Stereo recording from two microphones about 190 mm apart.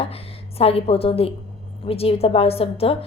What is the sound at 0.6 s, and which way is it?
A woman's voice, 30° left (ahead or behind).